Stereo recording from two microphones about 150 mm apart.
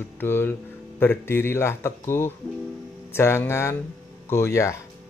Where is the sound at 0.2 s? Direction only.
15° left (ahead or behind).